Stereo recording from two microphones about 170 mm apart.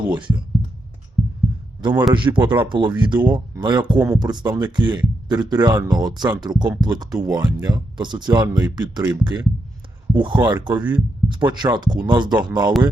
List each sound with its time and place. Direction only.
0.1 s speech: 25° right (ahead or behind)
1.8 s speech: 25° right (ahead or behind)